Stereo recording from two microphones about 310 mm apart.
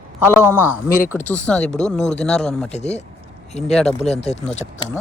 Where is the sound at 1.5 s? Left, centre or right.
Centre.